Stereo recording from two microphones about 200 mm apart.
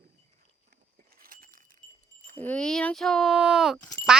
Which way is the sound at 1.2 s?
45° right (ahead or behind).